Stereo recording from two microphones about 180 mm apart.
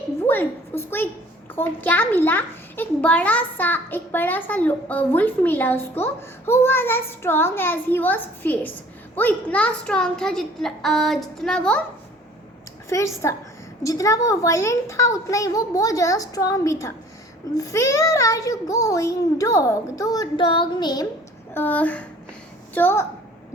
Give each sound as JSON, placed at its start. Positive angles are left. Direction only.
{"t": 0.3, "sound": "a sound", "side_deg": 10}
{"t": 1.5, "sound": "a child's voice", "side_deg": 10}
{"t": 12.9, "sound": "a child's voice", "side_deg": 15}
{"t": 21.5, "sound": "a child's voice", "side_deg": 10}